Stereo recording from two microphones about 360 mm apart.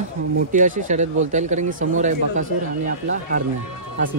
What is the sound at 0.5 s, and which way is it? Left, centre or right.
Speech, right.